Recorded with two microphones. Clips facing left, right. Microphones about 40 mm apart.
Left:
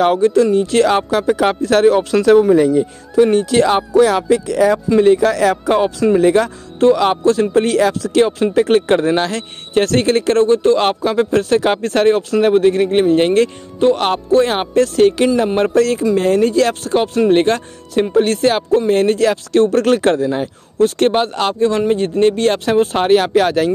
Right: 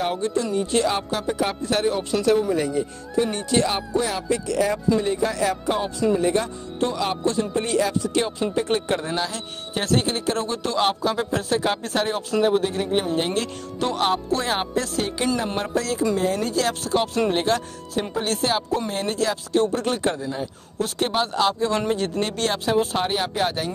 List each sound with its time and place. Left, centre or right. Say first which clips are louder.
0.0 s speech: left 12 dB; left
0.7 s speech: left 9 dB; left
5.0 s speech: left 11 dB; left
6.1 s speech: left 9 dB; left
8.2 s speech: left 13 dB; left
9.1 s speech: left 9 dB; left
20.7 s speech: left 12 dB; left
21.1 s speech: left 5 dB; left
21.7 s speech: left 8 dB; left